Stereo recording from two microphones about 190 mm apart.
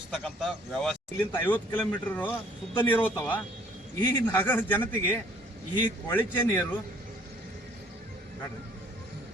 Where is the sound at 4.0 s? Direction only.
20° left (ahead or behind).